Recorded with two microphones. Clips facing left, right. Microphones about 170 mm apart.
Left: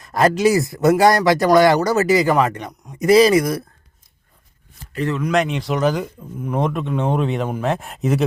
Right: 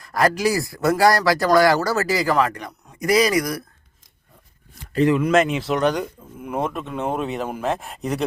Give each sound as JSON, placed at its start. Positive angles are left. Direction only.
{"t": 0.0, "sound": "speech", "side_deg": 25}
{"t": 4.9, "sound": "speech", "side_deg": -10}